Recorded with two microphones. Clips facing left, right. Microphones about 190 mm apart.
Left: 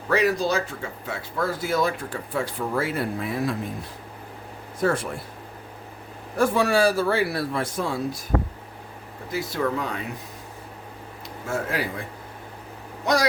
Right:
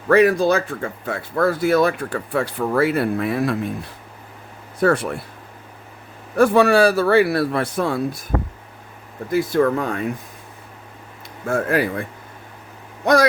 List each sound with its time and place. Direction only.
0.1 s speech: 55° right (ahead or behind)
4.8 s speech: 65° right (ahead or behind)
6.3 s speech: 65° right (ahead or behind)
9.3 s speech: 55° right (ahead or behind)
11.4 s speech: 55° right (ahead or behind)
13.0 s speech: 60° right (ahead or behind)